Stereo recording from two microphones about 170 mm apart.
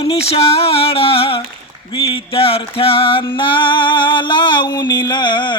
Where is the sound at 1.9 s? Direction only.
30° left (ahead or behind).